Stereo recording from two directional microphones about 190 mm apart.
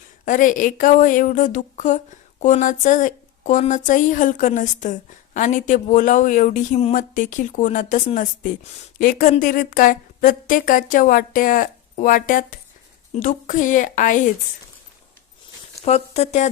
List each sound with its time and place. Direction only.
0.3 s a woman's voice: 45° left (ahead or behind)
15.8 s speech: 35° left (ahead or behind)